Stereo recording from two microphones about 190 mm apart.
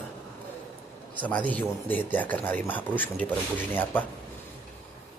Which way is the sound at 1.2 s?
5° left (ahead or behind).